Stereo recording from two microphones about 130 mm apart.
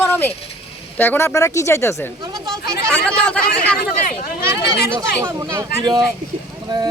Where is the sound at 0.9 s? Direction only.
15° left (ahead or behind).